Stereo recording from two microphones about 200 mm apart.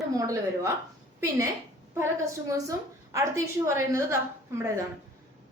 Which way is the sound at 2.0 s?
15° right (ahead or behind).